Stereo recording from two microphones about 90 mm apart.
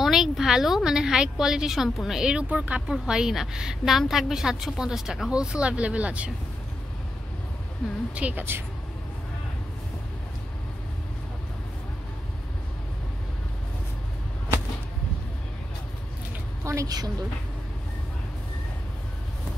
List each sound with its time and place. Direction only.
0.0 s a woman's voice: 5° right (ahead or behind)
8.1 s speech: 15° right (ahead or behind)
16.6 s a woman's voice: 40° right (ahead or behind)